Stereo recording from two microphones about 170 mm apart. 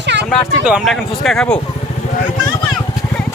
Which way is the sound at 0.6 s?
Centre (ahead or behind).